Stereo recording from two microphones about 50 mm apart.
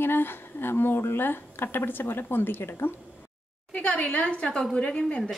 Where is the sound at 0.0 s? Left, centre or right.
Left.